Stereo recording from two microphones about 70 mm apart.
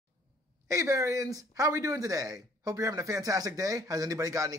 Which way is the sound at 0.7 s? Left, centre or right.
Right.